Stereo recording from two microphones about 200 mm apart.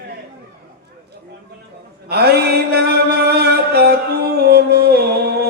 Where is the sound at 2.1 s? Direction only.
55° right (ahead or behind).